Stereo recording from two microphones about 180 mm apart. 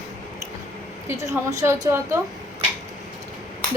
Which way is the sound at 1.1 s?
15° right (ahead or behind).